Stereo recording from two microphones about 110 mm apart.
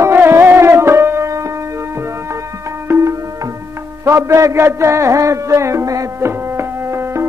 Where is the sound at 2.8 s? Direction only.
25° right (ahead or behind).